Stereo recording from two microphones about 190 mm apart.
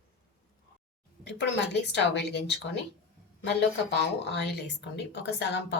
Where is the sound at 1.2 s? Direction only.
60° left (ahead or behind).